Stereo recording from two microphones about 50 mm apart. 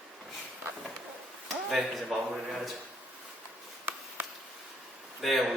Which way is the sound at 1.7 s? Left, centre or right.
Centre.